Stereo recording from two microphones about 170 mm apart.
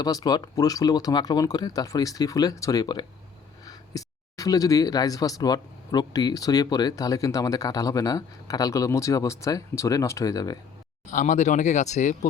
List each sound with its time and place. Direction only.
0.0 s speech: 20° left (ahead or behind)
11.1 s speech: 50° left (ahead or behind)